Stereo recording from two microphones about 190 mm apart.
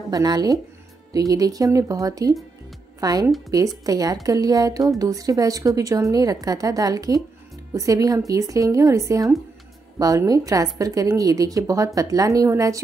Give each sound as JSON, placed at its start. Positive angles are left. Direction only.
{"t": 0.1, "sound": "a woman's voice", "side_deg": -20}